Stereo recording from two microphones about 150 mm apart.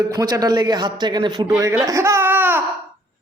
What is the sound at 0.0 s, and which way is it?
A man's voice, 25° right (ahead or behind).